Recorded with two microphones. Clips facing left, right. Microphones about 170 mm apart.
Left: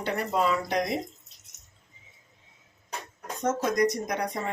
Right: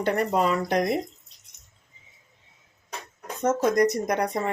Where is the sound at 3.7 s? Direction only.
55° right (ahead or behind).